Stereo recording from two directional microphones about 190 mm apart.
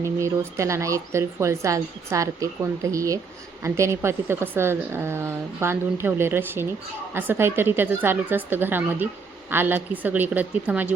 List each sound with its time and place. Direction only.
0.0 s speech: 15° right (ahead or behind)